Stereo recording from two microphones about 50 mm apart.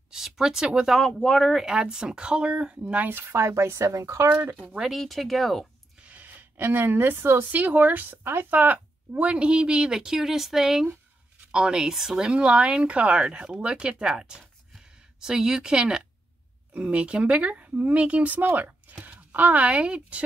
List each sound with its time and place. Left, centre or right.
0.1 s speech: centre
0.9 s speech: centre
1.6 s speech: centre
3.1 s a woman's voice: right
3.3 s speech: right
4.9 s speech: centre
6.0 s a sound: right
6.5 s a woman's voice: right
7.5 s speech: right
8.2 s a woman's voice: right
8.5 s speech: right; by 12.2 s centre
12.2 s speech: right